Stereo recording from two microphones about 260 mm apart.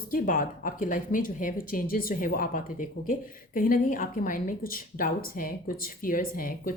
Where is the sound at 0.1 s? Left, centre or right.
Left.